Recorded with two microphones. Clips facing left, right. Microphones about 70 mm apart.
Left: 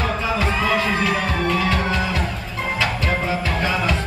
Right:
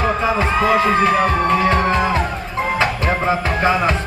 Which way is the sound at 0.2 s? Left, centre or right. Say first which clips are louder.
Right 5 dB; right.